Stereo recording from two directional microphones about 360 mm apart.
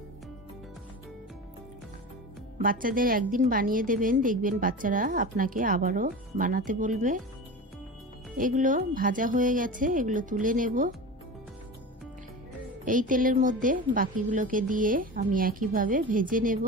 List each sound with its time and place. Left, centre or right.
2.6 s a woman's voice: right
8.4 s a woman's voice: right
12.8 s a woman's voice: right